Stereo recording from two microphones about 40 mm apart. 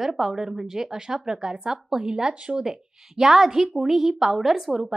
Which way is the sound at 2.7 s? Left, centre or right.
Centre.